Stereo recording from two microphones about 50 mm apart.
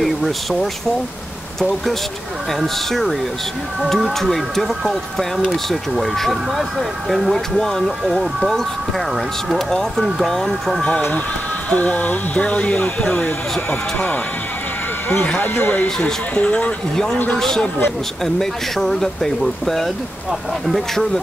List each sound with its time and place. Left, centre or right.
0.0 s speech: centre
2.6 s speech: centre
8.0 s speech: centre
9.7 s speech: centre
11.7 s speech: left
13.2 s speech: left
15.2 s speech: left
16.9 s speech: centre